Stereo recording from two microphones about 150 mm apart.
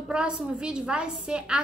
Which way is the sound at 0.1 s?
5° right (ahead or behind).